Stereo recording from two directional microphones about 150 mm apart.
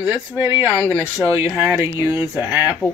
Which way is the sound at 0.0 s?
15° right (ahead or behind).